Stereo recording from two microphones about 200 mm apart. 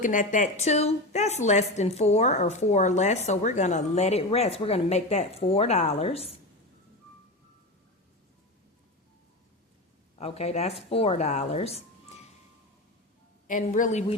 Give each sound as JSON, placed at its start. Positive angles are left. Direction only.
{"t": 0.0, "sound": "a woman's voice", "side_deg": 40}
{"t": 10.2, "sound": "a woman's voice", "side_deg": 30}
{"t": 13.5, "sound": "a woman's voice", "side_deg": 40}